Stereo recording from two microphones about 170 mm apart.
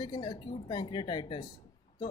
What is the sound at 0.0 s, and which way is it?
A woman's voice, 25° left (ahead or behind).